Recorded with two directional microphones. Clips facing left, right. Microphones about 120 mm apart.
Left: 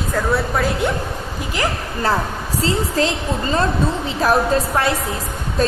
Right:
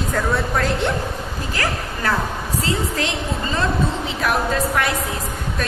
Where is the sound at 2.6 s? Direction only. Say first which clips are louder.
Left 6 dB; 35° left (ahead or behind).